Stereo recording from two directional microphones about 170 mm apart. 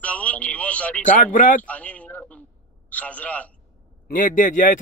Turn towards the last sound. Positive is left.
turn(degrees=50)  # may be behind; listen again after turning